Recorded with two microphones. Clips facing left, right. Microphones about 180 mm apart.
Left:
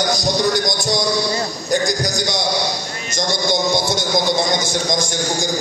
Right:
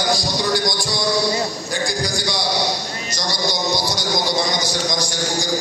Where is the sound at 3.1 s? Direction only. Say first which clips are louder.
Left 6 dB; 50° left (ahead or behind).